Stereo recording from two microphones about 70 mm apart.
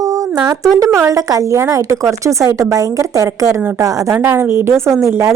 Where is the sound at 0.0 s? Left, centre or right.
Right.